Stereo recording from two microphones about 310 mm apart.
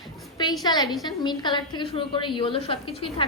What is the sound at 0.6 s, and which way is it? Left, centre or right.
A woman's voice, centre.